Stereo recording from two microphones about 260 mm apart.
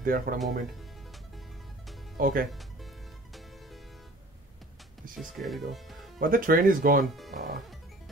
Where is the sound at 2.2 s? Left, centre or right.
Right.